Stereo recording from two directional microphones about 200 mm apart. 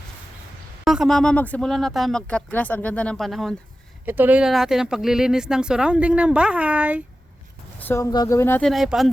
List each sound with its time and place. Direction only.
0.9 s speech: centre (ahead or behind)
7.8 s speech: 10° left (ahead or behind)
8.7 s speech: centre (ahead or behind)